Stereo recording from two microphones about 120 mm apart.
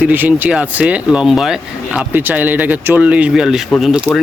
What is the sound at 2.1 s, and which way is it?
Speech, 15° right (ahead or behind).